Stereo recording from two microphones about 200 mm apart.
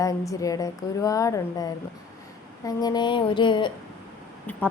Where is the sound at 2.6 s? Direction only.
20° left (ahead or behind).